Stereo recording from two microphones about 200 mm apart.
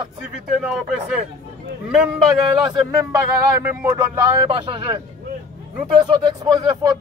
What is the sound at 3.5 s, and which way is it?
Speech, 15° right (ahead or behind).